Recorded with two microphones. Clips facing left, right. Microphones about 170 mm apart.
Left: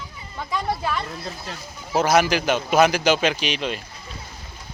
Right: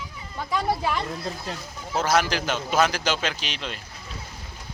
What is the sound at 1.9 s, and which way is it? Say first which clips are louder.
A man's voice: left 4 dB; 15° left (ahead or behind).